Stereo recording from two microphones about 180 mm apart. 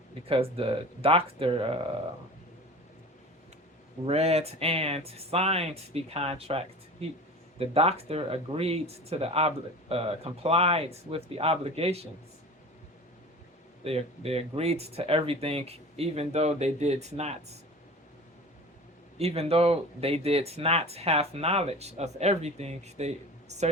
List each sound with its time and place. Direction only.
0.3 s speech: 30° right (ahead or behind)
4.0 s speech: 35° right (ahead or behind)
7.6 s speech: 35° right (ahead or behind)
13.8 s speech: 35° right (ahead or behind)
19.2 s speech: 35° right (ahead or behind)